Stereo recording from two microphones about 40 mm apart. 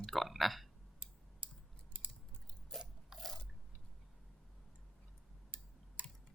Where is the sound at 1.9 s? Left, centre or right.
Right.